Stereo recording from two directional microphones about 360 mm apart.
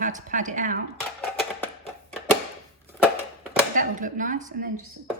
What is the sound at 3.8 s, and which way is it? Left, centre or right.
Speech, right.